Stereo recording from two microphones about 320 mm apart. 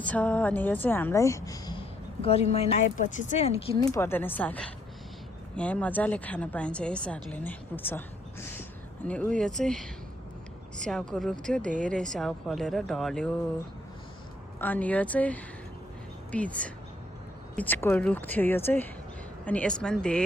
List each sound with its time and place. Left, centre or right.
0.0 s a woman's voice: centre
14.6 s a woman's voice: centre